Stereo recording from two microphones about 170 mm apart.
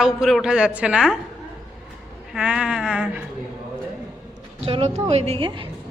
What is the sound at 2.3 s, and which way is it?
Speech, 5° right (ahead or behind).